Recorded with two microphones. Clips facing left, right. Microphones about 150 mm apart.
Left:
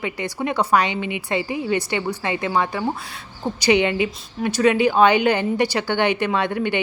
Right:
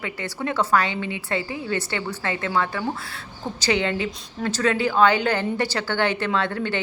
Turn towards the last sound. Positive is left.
turn(degrees=15)  # may be behind; listen again after turning